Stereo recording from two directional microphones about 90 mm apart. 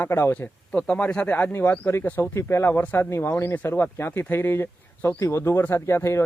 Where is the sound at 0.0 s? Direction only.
25° left (ahead or behind).